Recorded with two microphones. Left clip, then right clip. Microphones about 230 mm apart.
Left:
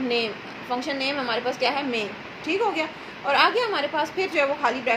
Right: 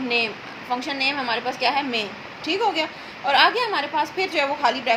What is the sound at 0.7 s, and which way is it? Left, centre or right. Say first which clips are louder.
A woman's voice: right 3 dB; right.